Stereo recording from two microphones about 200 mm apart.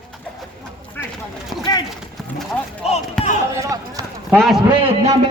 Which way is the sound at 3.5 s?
15° right (ahead or behind).